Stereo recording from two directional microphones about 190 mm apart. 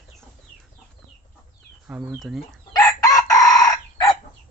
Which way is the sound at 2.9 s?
20° left (ahead or behind).